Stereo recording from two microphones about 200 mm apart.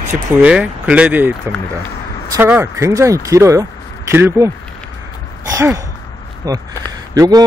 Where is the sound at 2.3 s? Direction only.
10° right (ahead or behind).